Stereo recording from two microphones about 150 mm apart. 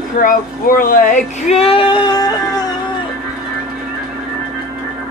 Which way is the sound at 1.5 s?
40° left (ahead or behind).